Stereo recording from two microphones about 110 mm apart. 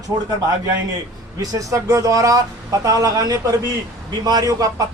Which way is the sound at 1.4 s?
30° right (ahead or behind).